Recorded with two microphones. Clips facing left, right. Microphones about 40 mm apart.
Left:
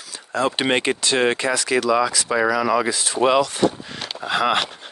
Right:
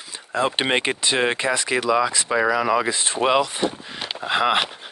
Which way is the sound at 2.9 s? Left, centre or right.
Right.